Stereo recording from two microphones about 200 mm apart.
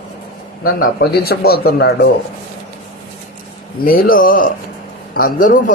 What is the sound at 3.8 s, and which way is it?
Speech, 45° left (ahead or behind).